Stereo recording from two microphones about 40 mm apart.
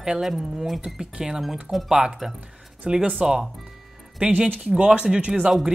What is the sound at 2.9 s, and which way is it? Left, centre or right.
Speech, right.